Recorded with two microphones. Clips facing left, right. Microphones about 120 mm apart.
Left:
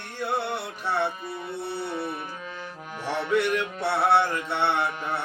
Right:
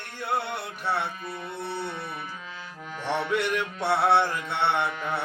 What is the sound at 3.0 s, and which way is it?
Music, 5° left (ahead or behind).